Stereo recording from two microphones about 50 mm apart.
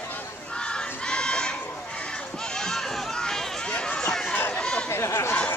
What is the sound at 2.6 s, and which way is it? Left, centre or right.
Run, centre.